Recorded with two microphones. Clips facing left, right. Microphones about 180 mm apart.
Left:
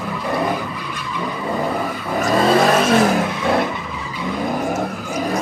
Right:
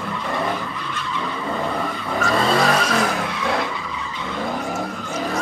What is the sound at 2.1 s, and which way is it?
Vehicle, 20° left (ahead or behind).